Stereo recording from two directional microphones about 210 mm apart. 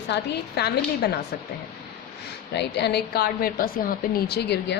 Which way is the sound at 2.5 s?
55° left (ahead or behind).